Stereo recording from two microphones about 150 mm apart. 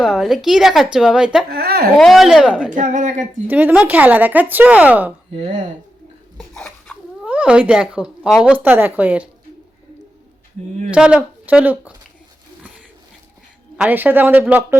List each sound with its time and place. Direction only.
0.0 s a woman's voice: centre (ahead or behind)
1.5 s speech: 90° right
2.0 s a woman's voice: centre (ahead or behind)
2.7 s speech: 60° right (ahead or behind)
3.4 s speech: 10° right (ahead or behind)
5.3 s speech: 45° right (ahead or behind)
6.3 s a sound: 5° left (ahead or behind)
7.3 s speech: 10° right (ahead or behind)
10.9 s speech: 5° right (ahead or behind)
13.7 s speech: 10° right (ahead or behind)